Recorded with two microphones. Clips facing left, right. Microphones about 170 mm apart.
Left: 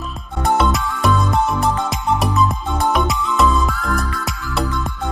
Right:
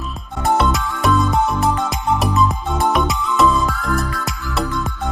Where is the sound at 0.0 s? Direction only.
Centre (ahead or behind).